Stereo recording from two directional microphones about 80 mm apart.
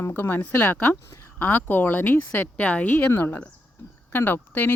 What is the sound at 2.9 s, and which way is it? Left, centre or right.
Speech, left.